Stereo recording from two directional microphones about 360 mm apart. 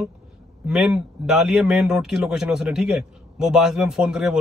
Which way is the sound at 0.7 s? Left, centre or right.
Centre.